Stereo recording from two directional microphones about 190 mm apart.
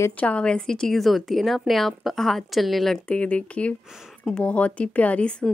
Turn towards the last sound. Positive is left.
turn(degrees=5)  # may be behind; listen again after turning